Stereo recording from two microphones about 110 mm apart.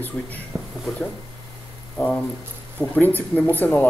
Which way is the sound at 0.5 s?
Centre (ahead or behind).